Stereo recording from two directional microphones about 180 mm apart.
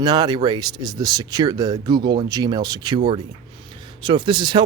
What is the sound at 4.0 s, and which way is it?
Speech, 25° right (ahead or behind).